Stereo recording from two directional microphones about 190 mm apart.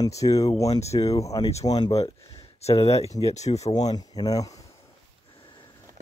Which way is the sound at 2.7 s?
15° left (ahead or behind).